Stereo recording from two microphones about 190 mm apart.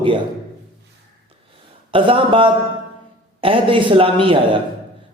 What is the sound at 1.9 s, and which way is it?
Speech, 25° right (ahead or behind).